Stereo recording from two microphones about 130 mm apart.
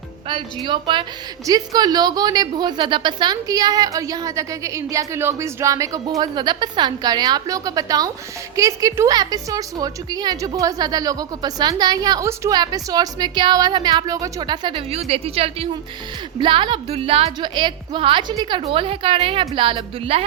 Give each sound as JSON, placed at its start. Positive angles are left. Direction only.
{"t": 0.3, "sound": "a woman's voice", "side_deg": -40}
{"t": 16.4, "sound": "a woman's voice", "side_deg": -40}